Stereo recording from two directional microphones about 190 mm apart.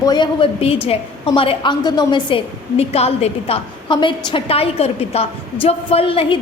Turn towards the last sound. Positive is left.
turn(degrees=30)  # may be behind; listen again after turning